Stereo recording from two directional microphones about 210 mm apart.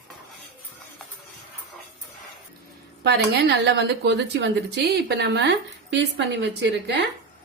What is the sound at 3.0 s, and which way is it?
A woman's voice, 55° right (ahead or behind).